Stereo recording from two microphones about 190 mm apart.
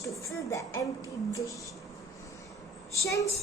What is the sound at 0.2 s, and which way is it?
Speech, 15° left (ahead or behind).